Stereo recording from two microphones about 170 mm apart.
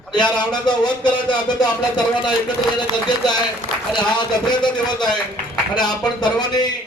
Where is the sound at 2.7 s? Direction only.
25° left (ahead or behind).